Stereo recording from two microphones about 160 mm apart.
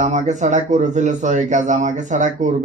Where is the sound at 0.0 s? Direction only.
45° right (ahead or behind).